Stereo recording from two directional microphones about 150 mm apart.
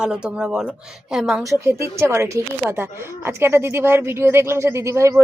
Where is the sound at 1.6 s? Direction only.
20° right (ahead or behind).